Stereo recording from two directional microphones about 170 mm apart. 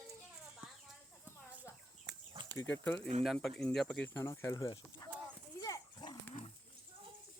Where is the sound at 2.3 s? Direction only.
20° right (ahead or behind).